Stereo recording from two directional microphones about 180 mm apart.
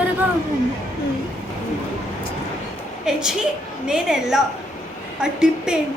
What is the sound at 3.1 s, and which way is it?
A woman's voice, 5° right (ahead or behind).